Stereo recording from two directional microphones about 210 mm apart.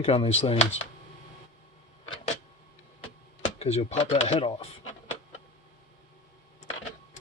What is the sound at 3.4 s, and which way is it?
Speech, 30° left (ahead or behind).